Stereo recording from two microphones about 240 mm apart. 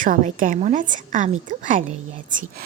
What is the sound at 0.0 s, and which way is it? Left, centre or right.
Speech, right.